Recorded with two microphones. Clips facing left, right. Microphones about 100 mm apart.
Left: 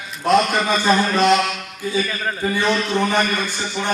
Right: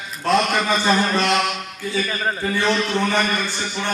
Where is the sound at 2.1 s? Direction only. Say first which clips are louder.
Right 1 dB; 20° right (ahead or behind).